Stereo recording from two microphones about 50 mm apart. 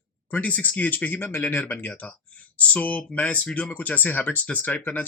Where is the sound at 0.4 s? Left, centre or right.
Left.